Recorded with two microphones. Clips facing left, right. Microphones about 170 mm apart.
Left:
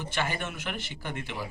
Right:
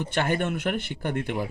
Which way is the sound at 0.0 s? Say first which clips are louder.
Right 7 dB; 60° right (ahead or behind).